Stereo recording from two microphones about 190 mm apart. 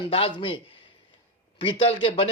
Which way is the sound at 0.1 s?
30° left (ahead or behind).